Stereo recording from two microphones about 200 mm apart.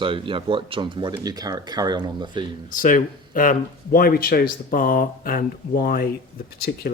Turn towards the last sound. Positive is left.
turn(degrees=55)  # may be behind; listen again after turning